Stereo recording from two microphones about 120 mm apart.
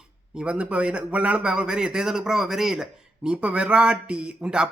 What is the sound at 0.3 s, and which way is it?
A man's voice, 10° right (ahead or behind).